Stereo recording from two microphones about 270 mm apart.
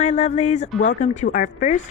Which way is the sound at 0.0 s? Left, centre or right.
Left.